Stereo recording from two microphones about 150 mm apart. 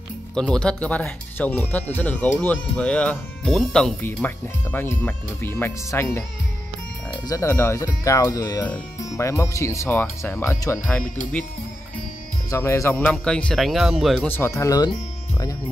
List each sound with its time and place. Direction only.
0.3 s speech: 5° left (ahead or behind)
7.2 s speech: 20° left (ahead or behind)
12.4 s speech: 20° left (ahead or behind)
12.9 s speech: 5° left (ahead or behind)
14.2 s speech: 15° left (ahead or behind)